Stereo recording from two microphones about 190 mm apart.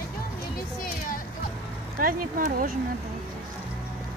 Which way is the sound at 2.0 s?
45° right (ahead or behind).